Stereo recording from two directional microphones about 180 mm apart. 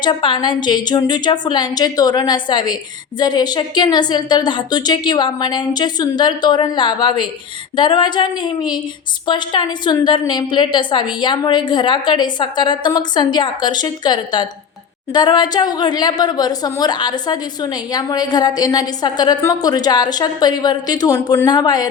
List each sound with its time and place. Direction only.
0.0 s a woman's voice: 25° left (ahead or behind)